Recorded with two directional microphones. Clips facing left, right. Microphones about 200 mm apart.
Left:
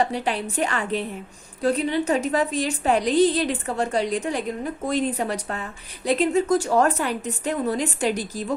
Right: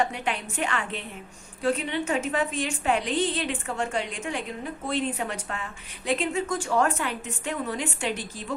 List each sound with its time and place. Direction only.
0.0 s a woman's voice: 35° left (ahead or behind)